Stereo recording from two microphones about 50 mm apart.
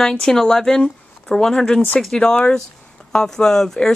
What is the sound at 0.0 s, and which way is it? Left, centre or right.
Speech, centre.